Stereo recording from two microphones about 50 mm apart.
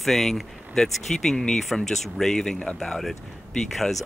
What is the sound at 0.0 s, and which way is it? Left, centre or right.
Speech, centre.